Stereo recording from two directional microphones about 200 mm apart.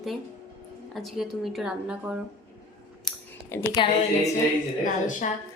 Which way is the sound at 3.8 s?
25° left (ahead or behind).